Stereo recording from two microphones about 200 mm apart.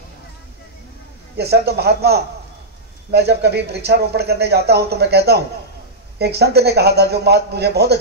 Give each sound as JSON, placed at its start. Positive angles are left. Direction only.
{"t": 1.3, "sound": "speech", "side_deg": -55}